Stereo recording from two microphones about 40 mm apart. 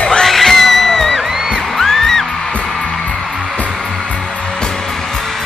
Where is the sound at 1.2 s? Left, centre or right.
Centre.